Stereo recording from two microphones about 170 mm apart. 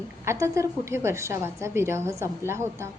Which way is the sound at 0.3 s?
15° right (ahead or behind).